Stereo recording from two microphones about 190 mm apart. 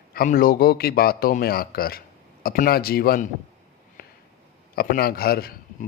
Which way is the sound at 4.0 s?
50° left (ahead or behind).